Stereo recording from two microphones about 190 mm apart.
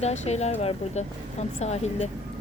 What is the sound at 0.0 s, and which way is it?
Speech, 35° left (ahead or behind).